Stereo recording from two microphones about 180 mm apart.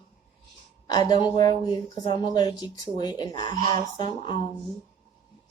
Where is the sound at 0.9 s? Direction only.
25° left (ahead or behind).